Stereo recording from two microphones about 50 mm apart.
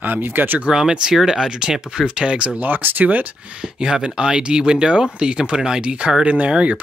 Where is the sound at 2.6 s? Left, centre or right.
Right.